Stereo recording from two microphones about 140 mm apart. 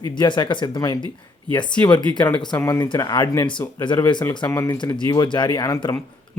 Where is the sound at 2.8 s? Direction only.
30° left (ahead or behind).